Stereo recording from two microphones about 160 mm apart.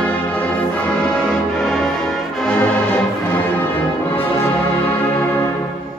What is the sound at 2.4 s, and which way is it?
Music, 10° left (ahead or behind).